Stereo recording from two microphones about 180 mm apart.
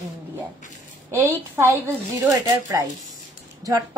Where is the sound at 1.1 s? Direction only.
15° right (ahead or behind).